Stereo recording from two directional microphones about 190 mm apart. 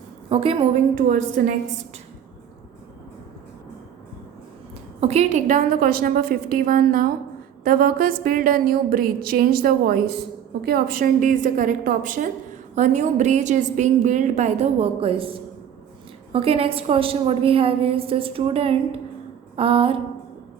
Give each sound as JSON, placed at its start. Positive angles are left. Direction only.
{"t": 0.3, "sound": "a woman's voice", "side_deg": -30}
{"t": 0.9, "sound": "a woman's voice", "side_deg": -45}
{"t": 4.9, "sound": "a woman's voice", "side_deg": -35}